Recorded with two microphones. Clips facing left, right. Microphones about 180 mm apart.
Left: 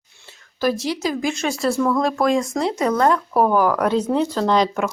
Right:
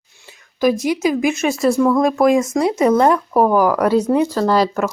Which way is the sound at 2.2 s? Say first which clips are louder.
Right 5 dB; 20° right (ahead or behind).